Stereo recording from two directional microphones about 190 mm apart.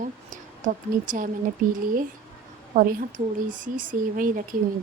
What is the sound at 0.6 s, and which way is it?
Speech, 45° right (ahead or behind).